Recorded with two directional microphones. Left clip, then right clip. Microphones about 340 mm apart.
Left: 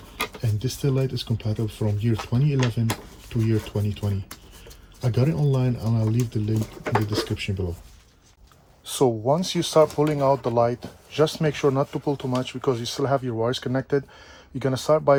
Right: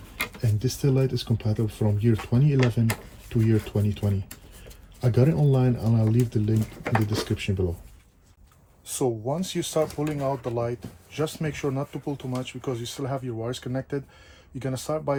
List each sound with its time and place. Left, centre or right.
0.2 s speech: centre
8.9 s speech: left
9.4 s speech: left
9.6 s speech: left